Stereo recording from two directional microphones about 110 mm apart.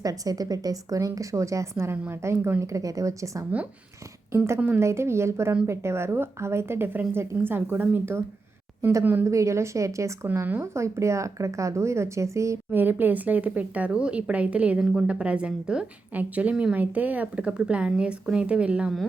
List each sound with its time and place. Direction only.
0.0 s a woman's voice: 35° right (ahead or behind)
4.4 s a woman's voice: 20° right (ahead or behind)
10.2 s speech: 15° right (ahead or behind)